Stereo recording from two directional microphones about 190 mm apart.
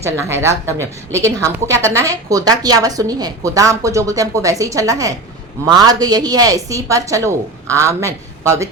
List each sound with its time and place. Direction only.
0.0 s a woman's voice: 15° right (ahead or behind)